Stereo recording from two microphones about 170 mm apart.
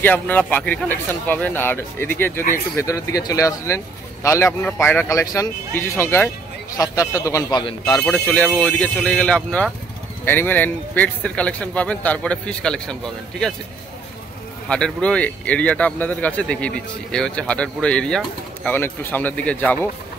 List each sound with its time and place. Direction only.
0.0 s speech: 10° left (ahead or behind); by 8.0 s 25° left (ahead or behind)
8.0 s speech: 10° left (ahead or behind)
14.7 s speech: 5° left (ahead or behind)